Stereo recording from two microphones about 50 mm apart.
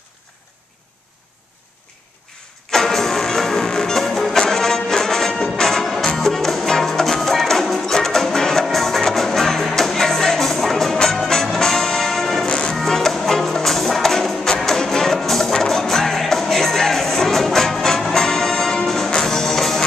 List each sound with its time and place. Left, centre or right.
2.7 s music: centre
12.4 s music: centre